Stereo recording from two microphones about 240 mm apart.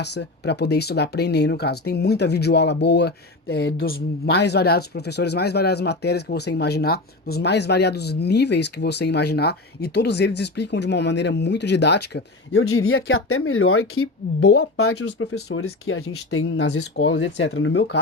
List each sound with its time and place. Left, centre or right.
0.0 s speech: left